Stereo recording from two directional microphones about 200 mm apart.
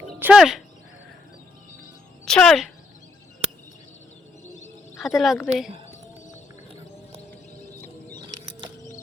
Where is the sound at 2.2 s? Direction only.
5° left (ahead or behind).